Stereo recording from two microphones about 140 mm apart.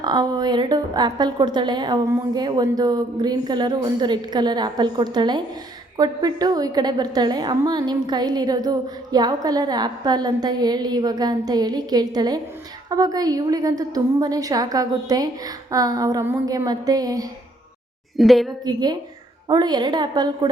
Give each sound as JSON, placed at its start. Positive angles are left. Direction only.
{"t": 0.0, "sound": "a woman's voice", "side_deg": -30}
{"t": 18.2, "sound": "a woman's voice", "side_deg": 0}
{"t": 18.6, "sound": "a woman's voice", "side_deg": -30}